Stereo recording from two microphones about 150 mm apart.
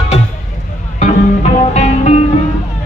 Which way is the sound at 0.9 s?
50° left (ahead or behind).